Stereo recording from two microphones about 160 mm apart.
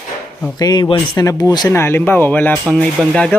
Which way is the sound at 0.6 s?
25° left (ahead or behind).